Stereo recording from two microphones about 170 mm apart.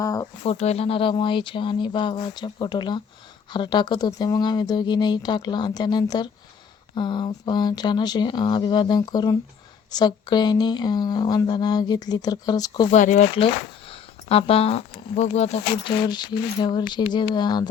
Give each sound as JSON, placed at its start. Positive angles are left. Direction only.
{"t": 0.0, "sound": "a woman's voice", "side_deg": 20}
{"t": 0.4, "sound": "a woman's voice", "side_deg": 40}
{"t": 12.9, "sound": "speech", "side_deg": 45}
{"t": 13.3, "sound": "speech", "side_deg": 30}